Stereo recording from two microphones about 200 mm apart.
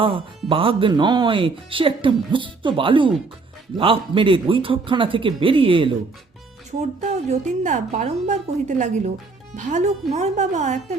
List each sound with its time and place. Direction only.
0.0 s a woman's voice: 25° right (ahead or behind)